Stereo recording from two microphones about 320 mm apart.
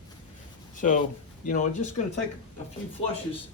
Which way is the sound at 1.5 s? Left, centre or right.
Left.